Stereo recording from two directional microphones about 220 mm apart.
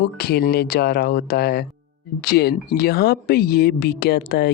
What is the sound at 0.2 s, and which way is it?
Speech, 45° left (ahead or behind).